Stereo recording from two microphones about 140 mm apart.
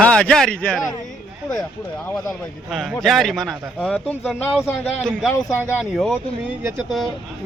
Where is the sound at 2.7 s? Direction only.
Centre (ahead or behind); by 5.7 s 20° left (ahead or behind).